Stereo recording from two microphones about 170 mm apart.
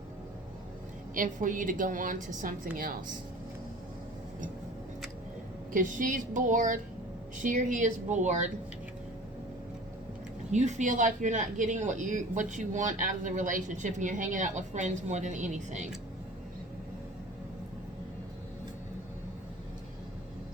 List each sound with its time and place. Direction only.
1.1 s a woman's voice: 50° right (ahead or behind)
5.7 s speech: 50° right (ahead or behind)
10.5 s speech: 45° right (ahead or behind)